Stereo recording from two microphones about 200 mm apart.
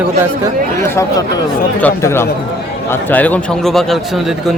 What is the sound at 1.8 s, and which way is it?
A man's voice, 15° left (ahead or behind).